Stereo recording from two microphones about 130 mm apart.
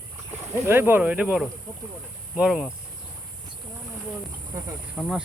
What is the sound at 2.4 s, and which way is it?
Speech, centre (ahead or behind).